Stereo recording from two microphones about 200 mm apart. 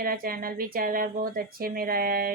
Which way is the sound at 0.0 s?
45° right (ahead or behind).